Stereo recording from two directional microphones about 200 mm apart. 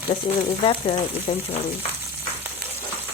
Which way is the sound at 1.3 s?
25° left (ahead or behind).